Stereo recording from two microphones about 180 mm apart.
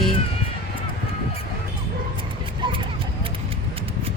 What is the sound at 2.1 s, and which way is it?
Dog, 25° right (ahead or behind).